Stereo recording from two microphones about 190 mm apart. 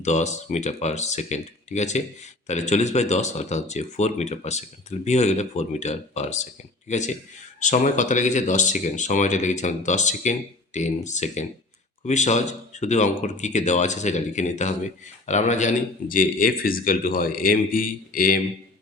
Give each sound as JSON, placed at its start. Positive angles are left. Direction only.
{"t": 0.0, "sound": "speech", "side_deg": 40}